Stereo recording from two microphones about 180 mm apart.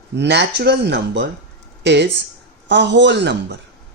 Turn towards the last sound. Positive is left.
turn(degrees=-75)  # may be behind; listen again after turning